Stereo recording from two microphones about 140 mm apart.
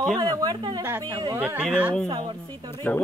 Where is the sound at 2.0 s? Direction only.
30° right (ahead or behind).